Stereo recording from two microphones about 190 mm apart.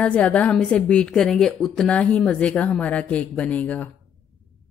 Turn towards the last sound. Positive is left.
turn(degrees=10)  # may be behind; listen again after turning